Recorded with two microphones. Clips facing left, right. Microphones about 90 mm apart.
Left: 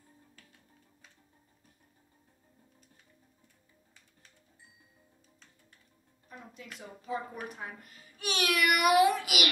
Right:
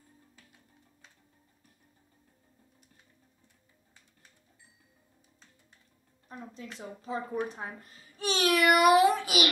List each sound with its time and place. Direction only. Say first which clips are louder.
6.2 s speech: right 5 dB; 30° right (ahead or behind)